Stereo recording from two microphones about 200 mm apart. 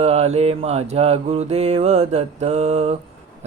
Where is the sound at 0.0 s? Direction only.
30° right (ahead or behind).